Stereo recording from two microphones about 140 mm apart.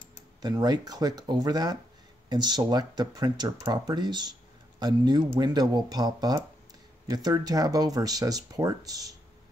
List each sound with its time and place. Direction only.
0.4 s speech: 30° right (ahead or behind)